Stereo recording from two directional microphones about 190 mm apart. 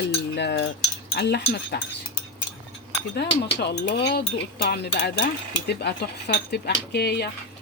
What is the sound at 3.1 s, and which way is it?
Speech, 60° left (ahead or behind).